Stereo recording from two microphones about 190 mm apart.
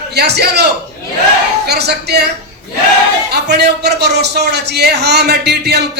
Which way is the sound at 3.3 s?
60° right (ahead or behind).